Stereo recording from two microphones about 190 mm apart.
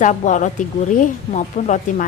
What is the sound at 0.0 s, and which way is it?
A woman's voice, 40° left (ahead or behind).